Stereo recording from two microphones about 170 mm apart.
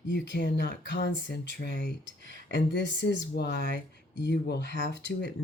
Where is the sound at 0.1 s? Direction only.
70° left (ahead or behind).